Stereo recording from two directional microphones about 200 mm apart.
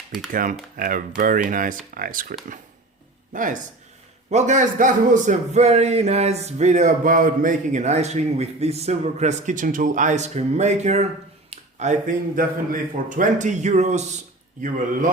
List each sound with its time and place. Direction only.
0.3 s speech: 45° right (ahead or behind)
3.3 s a man's voice: 40° right (ahead or behind)